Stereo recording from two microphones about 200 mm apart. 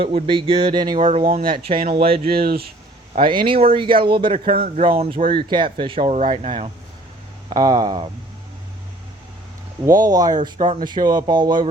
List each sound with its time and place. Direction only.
0.3 s speech: 25° right (ahead or behind)
1.3 s speech: 45° right (ahead or behind)
2.0 s speech: 30° right (ahead or behind)
2.2 s speech: 50° right (ahead or behind)
3.2 s speech: 25° right (ahead or behind)
7.5 s speech: 20° right (ahead or behind)
9.8 s speech: 20° right (ahead or behind)
10.6 s speech: 35° right (ahead or behind)
10.8 s speech: 20° right (ahead or behind)